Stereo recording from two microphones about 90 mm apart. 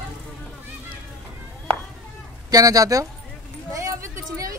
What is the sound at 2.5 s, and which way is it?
Speech, 45° right (ahead or behind).